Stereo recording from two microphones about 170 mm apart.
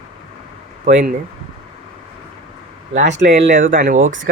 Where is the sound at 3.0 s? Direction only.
90° right.